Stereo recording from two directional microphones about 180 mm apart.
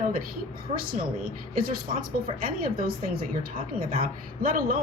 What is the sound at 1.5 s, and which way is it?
A woman's voice, 55° right (ahead or behind).